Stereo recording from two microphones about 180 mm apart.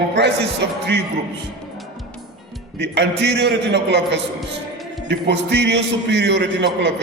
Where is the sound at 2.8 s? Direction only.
70° right (ahead or behind).